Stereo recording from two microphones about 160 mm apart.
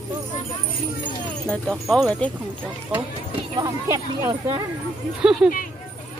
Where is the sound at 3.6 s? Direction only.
20° right (ahead or behind).